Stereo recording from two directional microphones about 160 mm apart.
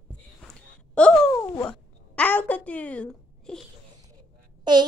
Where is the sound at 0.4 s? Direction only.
5° left (ahead or behind).